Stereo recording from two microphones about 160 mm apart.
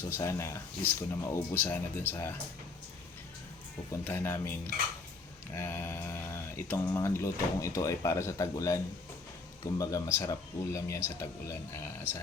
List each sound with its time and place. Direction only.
0.0 s speech: 20° left (ahead or behind)
4.0 s speech: 15° left (ahead or behind)